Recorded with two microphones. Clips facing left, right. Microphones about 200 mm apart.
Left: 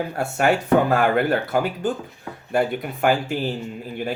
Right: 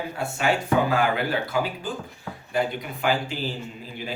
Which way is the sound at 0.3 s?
55° left (ahead or behind).